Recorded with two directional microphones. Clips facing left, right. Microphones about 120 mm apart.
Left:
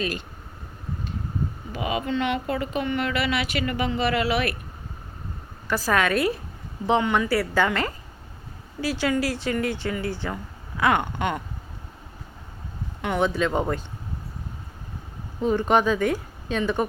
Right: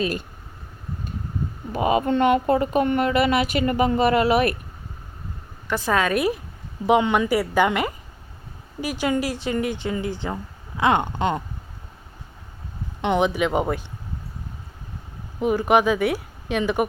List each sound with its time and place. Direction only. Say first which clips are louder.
1.7 s speech: right 7 dB; 40° right (ahead or behind)
5.6 s speech: right 1 dB; 20° right (ahead or behind)
13.0 s speech: right 3 dB; 20° right (ahead or behind)
15.4 s speech: right 2 dB; 15° right (ahead or behind)